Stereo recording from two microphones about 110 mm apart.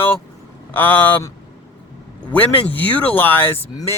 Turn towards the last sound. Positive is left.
turn(degrees=20)  # may be behind; listen again after turning